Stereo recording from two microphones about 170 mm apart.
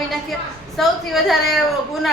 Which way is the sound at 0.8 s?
Centre (ahead or behind).